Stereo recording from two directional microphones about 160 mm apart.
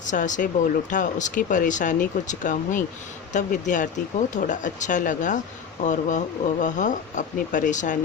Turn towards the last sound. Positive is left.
turn(degrees=50)  # may be behind; listen again after turning